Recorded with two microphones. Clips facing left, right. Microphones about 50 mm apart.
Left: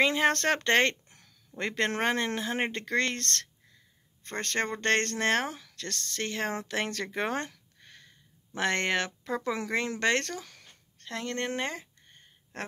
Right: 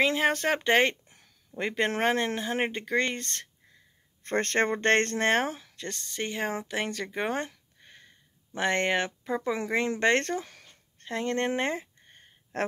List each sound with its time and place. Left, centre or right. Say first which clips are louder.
0.0 s a woman's voice: even; centre
4.2 s speech: right 5 dB; right
11.0 s a sound: right 5 dB; right